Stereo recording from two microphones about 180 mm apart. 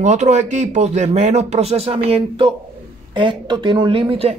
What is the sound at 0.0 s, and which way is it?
Speech, 40° right (ahead or behind).